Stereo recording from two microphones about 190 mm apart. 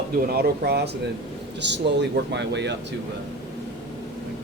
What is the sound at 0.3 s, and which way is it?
Speech, 55° right (ahead or behind).